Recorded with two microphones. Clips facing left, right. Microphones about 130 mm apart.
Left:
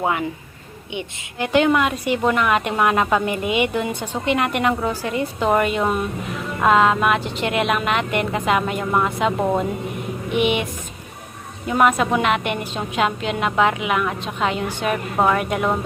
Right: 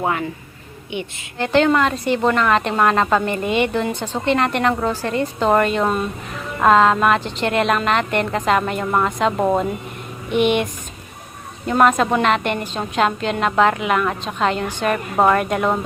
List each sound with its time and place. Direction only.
0.0 s a woman's voice: 15° left (ahead or behind)
10.3 s a woman's voice: 5° left (ahead or behind)